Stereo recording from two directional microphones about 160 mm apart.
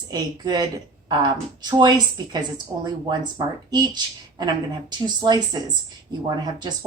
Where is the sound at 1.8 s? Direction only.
25° right (ahead or behind).